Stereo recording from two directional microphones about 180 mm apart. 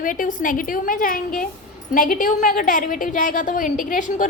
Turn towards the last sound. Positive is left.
turn(degrees=50)  # may be behind; listen again after turning